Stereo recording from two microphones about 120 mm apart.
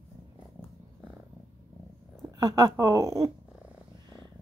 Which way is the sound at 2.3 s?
35° right (ahead or behind).